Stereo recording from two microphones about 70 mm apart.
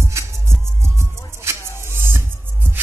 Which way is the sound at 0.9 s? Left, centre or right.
Right.